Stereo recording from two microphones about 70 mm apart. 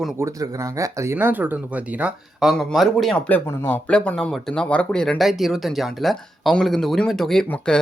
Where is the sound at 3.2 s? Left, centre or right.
Left.